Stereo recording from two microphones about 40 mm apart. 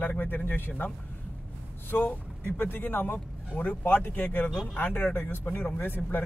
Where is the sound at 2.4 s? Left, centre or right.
Left.